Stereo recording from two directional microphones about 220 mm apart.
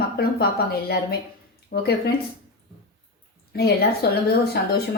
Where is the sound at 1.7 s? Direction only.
50° left (ahead or behind).